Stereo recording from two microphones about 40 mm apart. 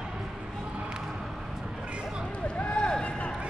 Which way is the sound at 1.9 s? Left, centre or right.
Right.